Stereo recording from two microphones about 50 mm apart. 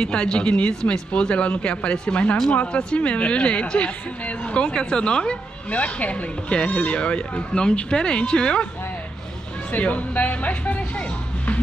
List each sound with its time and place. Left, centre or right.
0.0 s speech: centre
5.7 s speech: left
9.7 s music: left